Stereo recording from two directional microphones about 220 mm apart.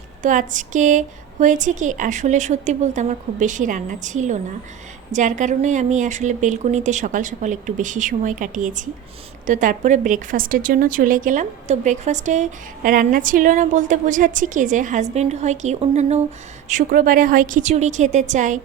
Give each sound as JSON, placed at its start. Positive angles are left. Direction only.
{"t": 0.2, "sound": "a woman's voice", "side_deg": -35}